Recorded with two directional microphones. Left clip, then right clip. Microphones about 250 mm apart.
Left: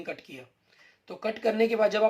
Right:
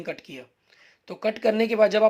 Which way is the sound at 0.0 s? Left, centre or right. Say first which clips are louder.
Right 4 dB; right.